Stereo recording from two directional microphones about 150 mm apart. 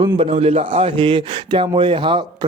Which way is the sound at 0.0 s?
40° right (ahead or behind).